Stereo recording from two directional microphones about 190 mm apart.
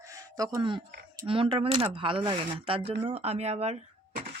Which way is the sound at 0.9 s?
60° right (ahead or behind).